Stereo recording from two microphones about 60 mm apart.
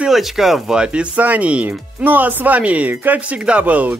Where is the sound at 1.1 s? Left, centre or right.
Right.